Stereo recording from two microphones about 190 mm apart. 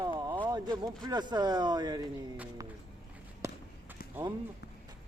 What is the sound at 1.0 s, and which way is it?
Speech, 20° right (ahead or behind).